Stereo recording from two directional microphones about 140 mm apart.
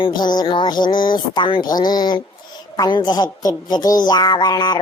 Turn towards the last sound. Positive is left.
turn(degrees=30)  # may be behind; listen again after turning